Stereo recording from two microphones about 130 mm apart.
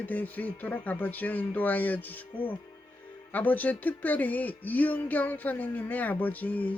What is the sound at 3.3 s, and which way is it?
Speech, 15° left (ahead or behind).